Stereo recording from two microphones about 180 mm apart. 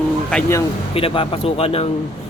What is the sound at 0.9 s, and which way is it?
Speech, 30° left (ahead or behind).